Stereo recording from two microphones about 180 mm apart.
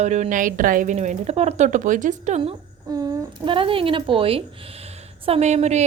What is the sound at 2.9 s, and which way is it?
A woman's voice, 20° right (ahead or behind).